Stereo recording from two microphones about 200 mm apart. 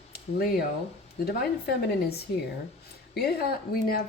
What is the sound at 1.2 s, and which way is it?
Speech, 55° left (ahead or behind).